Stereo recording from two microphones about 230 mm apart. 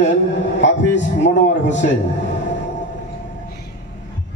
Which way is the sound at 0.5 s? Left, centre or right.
Left.